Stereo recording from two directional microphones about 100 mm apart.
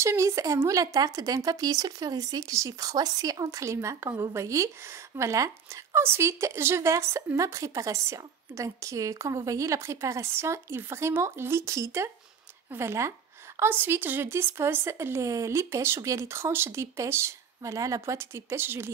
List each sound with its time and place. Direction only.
0.0 s speech: 30° right (ahead or behind)